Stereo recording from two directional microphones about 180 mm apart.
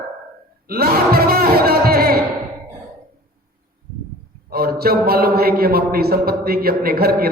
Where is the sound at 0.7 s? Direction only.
55° right (ahead or behind).